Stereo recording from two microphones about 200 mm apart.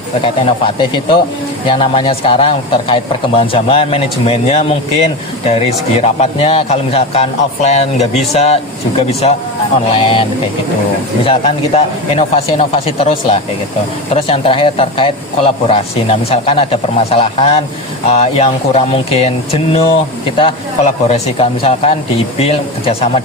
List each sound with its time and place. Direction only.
0.4 s a man's voice: 25° left (ahead or behind)
11.3 s a man's voice: 30° left (ahead or behind)
20.4 s a man's voice: 30° left (ahead or behind)